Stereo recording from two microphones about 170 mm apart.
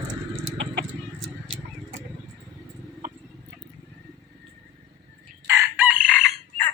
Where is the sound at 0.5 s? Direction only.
90° right.